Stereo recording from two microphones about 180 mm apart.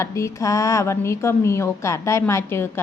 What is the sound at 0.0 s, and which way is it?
A woman's voice, 15° left (ahead or behind).